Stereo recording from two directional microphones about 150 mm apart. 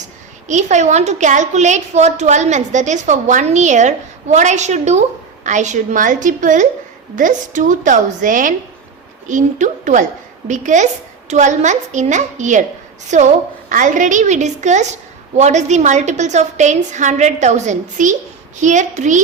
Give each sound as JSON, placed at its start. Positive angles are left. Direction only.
{"t": 0.4, "sound": "a woman's voice", "side_deg": -50}